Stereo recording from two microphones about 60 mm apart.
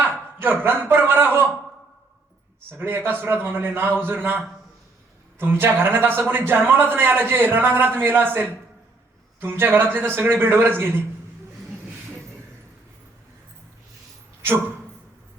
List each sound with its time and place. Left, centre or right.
0.0 s a man's voice: right
2.6 s a man's voice: right
5.4 s a man's voice: right